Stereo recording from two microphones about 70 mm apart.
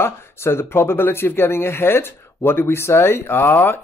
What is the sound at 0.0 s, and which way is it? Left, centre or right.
Speech, left.